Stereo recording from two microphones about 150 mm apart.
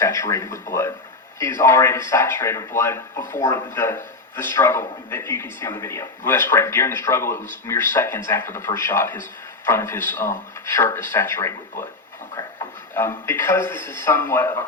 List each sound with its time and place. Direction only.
0.0 s speech: 20° left (ahead or behind)
12.9 s speech: 20° left (ahead or behind)